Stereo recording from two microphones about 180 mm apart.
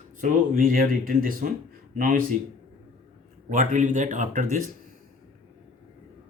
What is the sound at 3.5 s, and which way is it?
Speech, 45° right (ahead or behind).